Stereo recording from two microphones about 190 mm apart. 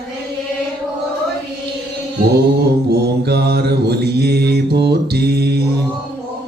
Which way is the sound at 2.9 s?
60° right (ahead or behind).